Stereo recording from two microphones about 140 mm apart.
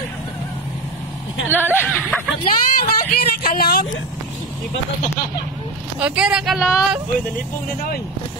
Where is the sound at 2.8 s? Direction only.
90° left.